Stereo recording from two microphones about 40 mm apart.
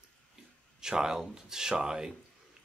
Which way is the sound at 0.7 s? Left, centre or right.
Centre.